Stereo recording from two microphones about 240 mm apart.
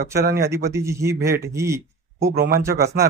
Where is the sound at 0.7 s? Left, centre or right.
Centre.